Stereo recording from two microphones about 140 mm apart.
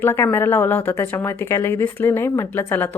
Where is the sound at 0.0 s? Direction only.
15° left (ahead or behind).